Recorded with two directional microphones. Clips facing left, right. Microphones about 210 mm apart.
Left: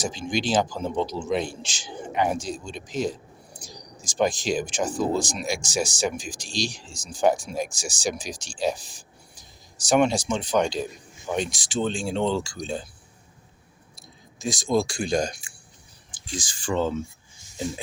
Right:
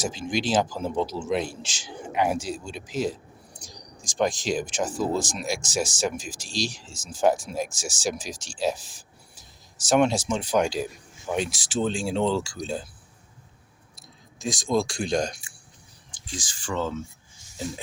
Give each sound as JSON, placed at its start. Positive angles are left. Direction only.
{"t": 0.0, "sound": "speech", "side_deg": -5}
{"t": 14.3, "sound": "speech", "side_deg": 0}
{"t": 16.1, "sound": "speech", "side_deg": 15}